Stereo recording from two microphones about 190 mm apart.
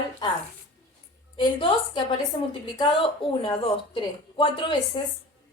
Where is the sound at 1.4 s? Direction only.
25° left (ahead or behind).